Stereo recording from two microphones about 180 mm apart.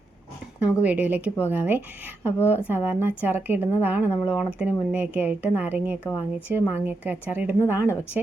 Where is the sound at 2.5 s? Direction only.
10° right (ahead or behind).